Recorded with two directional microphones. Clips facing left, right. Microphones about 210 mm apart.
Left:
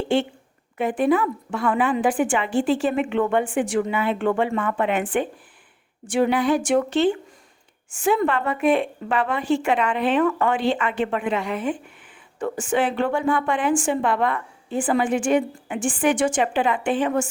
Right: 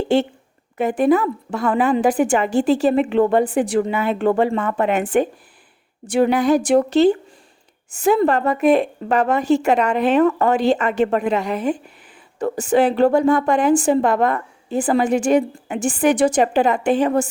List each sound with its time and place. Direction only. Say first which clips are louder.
0.1 s a woman's voice: right 4 dB; 40° right (ahead or behind)